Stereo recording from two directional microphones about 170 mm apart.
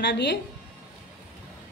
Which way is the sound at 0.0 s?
90° left.